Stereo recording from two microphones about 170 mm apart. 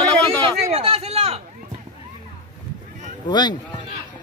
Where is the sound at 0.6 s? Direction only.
35° right (ahead or behind).